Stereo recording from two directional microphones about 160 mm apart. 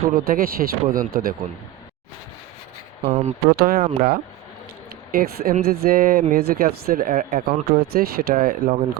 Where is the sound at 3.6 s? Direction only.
65° right (ahead or behind).